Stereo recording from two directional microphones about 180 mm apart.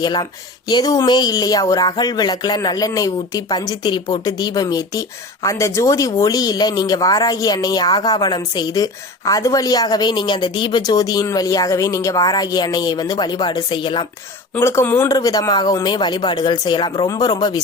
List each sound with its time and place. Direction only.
0.0 s speech: 25° left (ahead or behind)
14.5 s speech: 15° left (ahead or behind)